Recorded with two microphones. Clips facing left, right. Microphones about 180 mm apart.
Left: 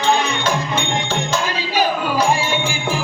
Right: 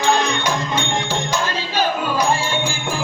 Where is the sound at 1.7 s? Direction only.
10° left (ahead or behind).